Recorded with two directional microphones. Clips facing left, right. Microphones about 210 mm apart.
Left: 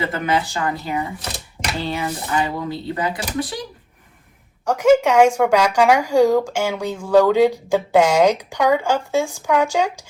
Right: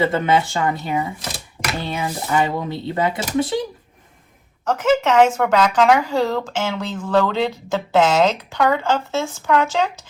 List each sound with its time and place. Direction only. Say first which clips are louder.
0.0 s speech: right 4 dB; 25° right (ahead or behind)
4.6 s speech: left 3 dB; 10° left (ahead or behind)